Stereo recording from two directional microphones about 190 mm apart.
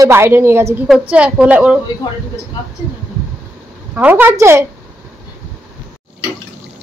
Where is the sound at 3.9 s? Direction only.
10° right (ahead or behind).